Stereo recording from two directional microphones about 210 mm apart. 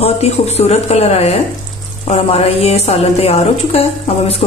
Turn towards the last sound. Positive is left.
turn(degrees=30)  # may be behind; listen again after turning